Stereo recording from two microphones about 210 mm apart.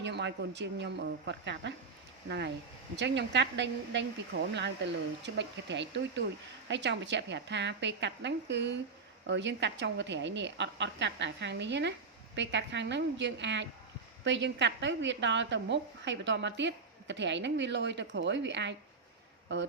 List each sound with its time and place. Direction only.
0.0 s a woman's voice: 55° right (ahead or behind)
2.9 s a woman's voice: 55° right (ahead or behind)